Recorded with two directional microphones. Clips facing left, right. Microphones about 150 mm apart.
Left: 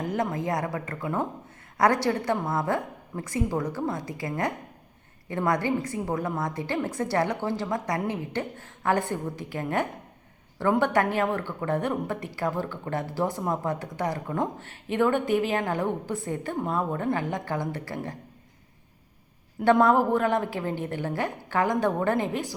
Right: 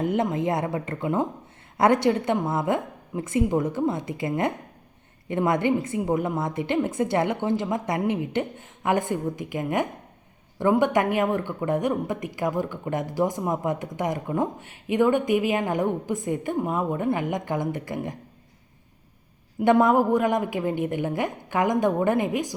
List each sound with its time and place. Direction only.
0.0 s a woman's voice: 25° right (ahead or behind)
19.7 s speech: 15° right (ahead or behind)